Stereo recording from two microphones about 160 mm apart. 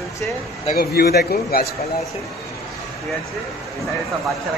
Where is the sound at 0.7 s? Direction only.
75° left (ahead or behind).